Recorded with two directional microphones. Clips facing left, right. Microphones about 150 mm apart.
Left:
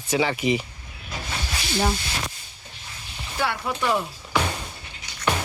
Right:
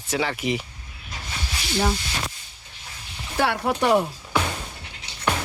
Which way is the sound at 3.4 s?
65° right (ahead or behind).